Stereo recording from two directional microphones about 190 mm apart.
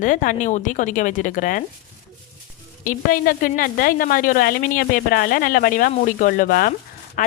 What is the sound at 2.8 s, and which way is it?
A woman's voice, 45° left (ahead or behind).